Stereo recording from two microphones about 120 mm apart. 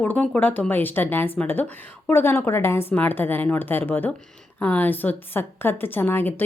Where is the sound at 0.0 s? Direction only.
15° left (ahead or behind).